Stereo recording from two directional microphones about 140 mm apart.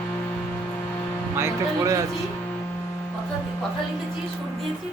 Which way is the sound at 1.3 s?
20° right (ahead or behind).